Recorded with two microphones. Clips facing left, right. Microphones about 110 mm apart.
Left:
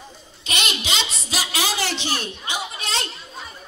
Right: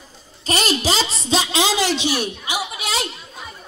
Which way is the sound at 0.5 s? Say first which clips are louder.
Right 7 dB; 35° right (ahead or behind).